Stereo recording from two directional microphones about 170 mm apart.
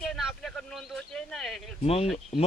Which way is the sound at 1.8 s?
35° left (ahead or behind).